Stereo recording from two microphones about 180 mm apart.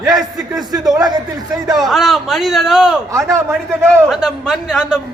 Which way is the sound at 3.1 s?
15° right (ahead or behind).